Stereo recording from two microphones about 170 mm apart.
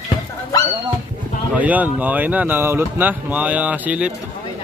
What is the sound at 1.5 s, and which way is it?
Speech, 10° right (ahead or behind).